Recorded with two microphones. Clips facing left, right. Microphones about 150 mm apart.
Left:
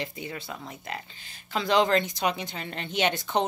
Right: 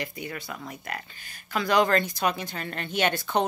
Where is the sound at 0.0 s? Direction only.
25° left (ahead or behind).